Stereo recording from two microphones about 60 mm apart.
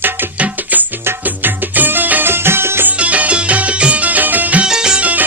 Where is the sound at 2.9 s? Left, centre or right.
Right.